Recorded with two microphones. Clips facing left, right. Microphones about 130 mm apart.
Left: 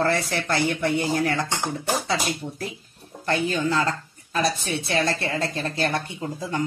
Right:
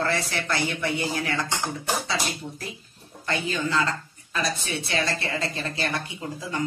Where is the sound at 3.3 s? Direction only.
45° left (ahead or behind).